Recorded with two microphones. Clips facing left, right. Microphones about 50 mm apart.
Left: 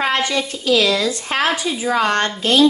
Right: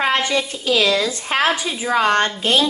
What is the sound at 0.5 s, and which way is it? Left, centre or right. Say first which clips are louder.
Speech: left 1 dB; right.